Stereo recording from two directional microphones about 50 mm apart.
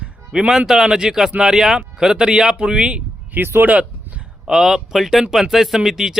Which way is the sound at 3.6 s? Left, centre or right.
Right.